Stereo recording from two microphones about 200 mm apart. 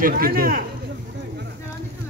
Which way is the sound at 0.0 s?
45° right (ahead or behind).